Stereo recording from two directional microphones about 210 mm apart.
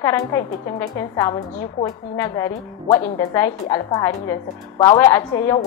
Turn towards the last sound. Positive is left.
turn(degrees=10)  # may be behind; listen again after turning